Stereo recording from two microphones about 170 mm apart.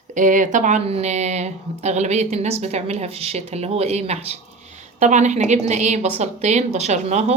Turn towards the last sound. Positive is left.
turn(degrees=-40)  # may be behind; listen again after turning